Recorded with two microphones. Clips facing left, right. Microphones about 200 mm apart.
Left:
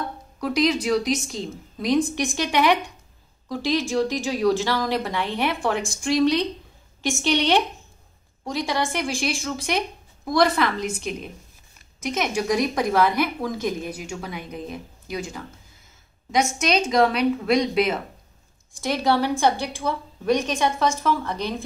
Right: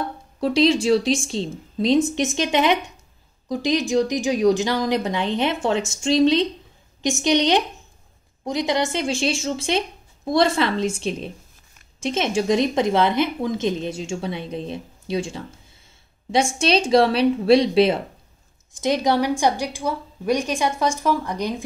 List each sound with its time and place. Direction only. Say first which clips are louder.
0.4 s a woman's voice: right 4 dB; 30° right (ahead or behind)
18.7 s a woman's voice: right 2 dB; 20° right (ahead or behind)